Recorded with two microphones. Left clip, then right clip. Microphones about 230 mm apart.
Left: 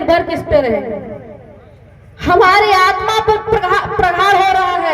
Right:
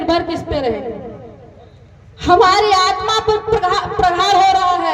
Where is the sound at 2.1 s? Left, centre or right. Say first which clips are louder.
Left 2 dB; left.